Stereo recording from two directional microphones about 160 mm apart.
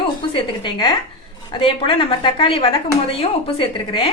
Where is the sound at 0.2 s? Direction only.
30° left (ahead or behind).